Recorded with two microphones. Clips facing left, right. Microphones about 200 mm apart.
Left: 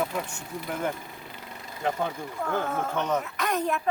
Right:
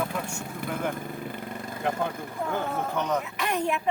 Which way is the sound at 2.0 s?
10° right (ahead or behind).